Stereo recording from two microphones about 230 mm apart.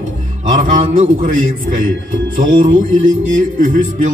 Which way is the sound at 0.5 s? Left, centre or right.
Right.